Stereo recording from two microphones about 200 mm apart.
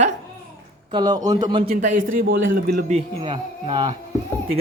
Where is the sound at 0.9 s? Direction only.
20° right (ahead or behind).